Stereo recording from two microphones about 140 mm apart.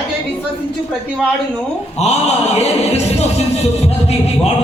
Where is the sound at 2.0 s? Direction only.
50° left (ahead or behind).